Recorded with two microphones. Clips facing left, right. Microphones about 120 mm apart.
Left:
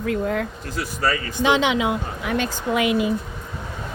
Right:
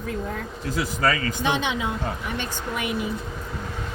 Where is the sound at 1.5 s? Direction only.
90° left.